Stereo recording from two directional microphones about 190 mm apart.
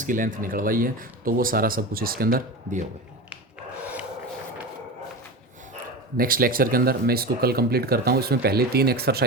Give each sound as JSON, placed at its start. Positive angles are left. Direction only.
{"t": 0.0, "sound": "speech", "side_deg": -45}
{"t": 6.1, "sound": "speech", "side_deg": -50}